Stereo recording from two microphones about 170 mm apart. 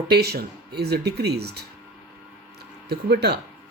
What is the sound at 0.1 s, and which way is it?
Speech, 70° right (ahead or behind).